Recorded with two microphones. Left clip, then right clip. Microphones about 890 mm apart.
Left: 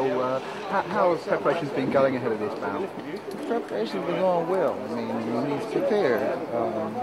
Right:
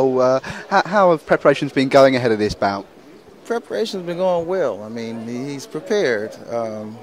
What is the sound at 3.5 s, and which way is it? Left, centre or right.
Speech, right.